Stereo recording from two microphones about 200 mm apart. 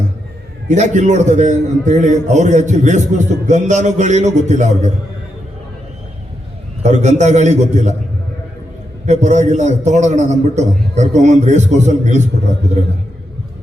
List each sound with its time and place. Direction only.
0.7 s a man's voice: 35° right (ahead or behind)
6.8 s a man's voice: 35° right (ahead or behind)
9.0 s a man's voice: 35° right (ahead or behind)